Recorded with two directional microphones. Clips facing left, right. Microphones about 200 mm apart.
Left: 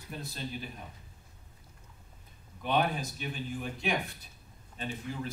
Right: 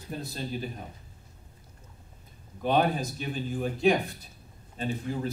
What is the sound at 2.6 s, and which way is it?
Speech, 40° right (ahead or behind).